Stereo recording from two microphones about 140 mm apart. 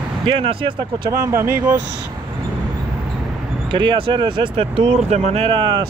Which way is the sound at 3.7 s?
35° right (ahead or behind).